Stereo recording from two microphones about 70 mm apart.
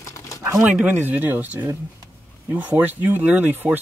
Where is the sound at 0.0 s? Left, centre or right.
Left.